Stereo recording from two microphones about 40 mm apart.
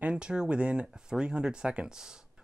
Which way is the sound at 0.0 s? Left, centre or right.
Right.